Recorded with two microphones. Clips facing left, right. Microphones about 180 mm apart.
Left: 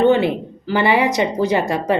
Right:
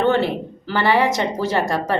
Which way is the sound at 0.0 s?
15° left (ahead or behind).